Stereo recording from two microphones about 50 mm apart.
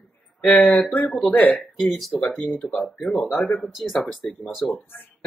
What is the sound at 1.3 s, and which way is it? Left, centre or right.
Speech, left.